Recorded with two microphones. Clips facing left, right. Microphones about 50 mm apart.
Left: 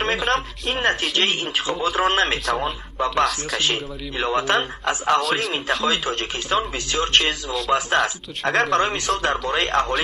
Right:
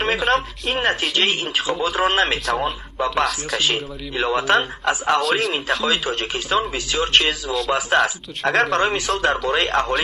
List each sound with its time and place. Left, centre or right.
0.0 s a man's voice: centre
5.9 s speech: centre
6.3 s a man's voice: centre
9.4 s a man's voice: centre